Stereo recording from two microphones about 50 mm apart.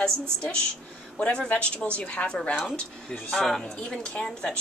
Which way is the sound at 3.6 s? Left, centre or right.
Centre.